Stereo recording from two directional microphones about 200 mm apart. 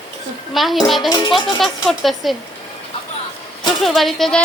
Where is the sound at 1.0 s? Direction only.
20° left (ahead or behind).